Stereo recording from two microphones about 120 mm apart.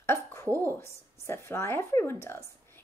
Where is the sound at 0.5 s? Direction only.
20° left (ahead or behind).